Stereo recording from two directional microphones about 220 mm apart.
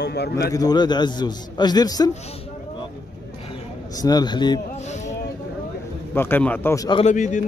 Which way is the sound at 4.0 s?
20° left (ahead or behind).